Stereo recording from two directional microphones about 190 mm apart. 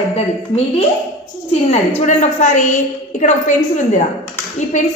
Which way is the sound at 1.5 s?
35° left (ahead or behind).